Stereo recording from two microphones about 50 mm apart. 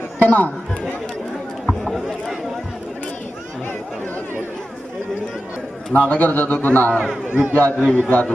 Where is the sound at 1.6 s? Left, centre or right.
Centre.